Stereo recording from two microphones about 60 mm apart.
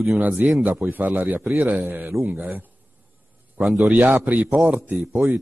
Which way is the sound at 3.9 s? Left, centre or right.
Right.